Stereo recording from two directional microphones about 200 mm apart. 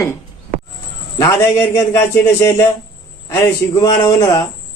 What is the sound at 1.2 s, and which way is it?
Speech, 15° left (ahead or behind).